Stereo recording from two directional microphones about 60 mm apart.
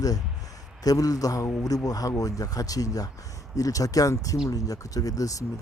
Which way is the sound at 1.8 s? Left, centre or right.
Left.